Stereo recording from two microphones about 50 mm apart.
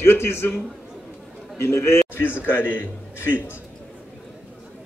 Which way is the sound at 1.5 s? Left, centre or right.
Left.